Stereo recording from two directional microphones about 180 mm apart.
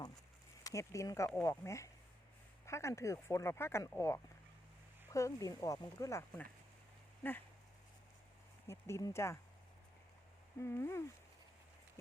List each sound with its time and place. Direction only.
0.6 s speech: 15° left (ahead or behind)
8.6 s speech: 15° left (ahead or behind)
10.6 s speech: 15° left (ahead or behind)